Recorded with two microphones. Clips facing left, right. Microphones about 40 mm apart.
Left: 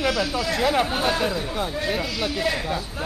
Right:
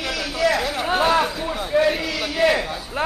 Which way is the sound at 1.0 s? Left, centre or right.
Right.